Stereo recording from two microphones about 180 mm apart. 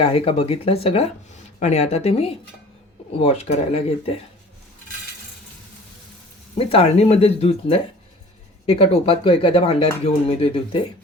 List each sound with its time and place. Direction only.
0.0 s speech: 30° left (ahead or behind)
6.6 s speech: 35° left (ahead or behind)